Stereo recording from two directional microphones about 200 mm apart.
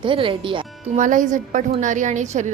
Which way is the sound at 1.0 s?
40° right (ahead or behind).